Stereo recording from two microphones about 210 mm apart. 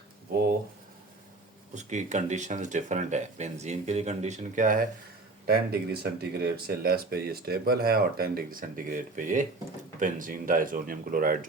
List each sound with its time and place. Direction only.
1.7 s speech: 35° right (ahead or behind)